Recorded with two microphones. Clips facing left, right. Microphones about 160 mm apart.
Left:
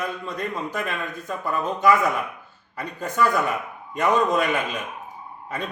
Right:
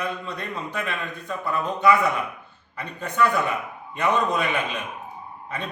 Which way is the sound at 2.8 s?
45° left (ahead or behind).